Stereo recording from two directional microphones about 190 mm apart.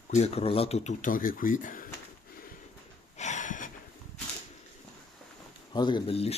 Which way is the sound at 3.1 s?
40° left (ahead or behind).